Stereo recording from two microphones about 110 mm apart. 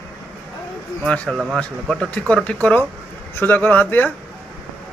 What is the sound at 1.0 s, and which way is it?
Speech, 10° left (ahead or behind).